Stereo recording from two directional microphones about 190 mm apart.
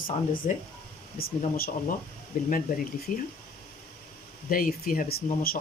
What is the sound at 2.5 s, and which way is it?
Speech, 45° left (ahead or behind).